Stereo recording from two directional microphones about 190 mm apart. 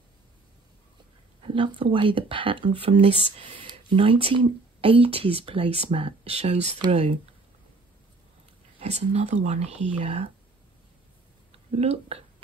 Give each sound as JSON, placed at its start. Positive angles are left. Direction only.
{"t": 1.5, "sound": "speech", "side_deg": -25}
{"t": 8.7, "sound": "speech", "side_deg": -35}
{"t": 11.7, "sound": "speech", "side_deg": -35}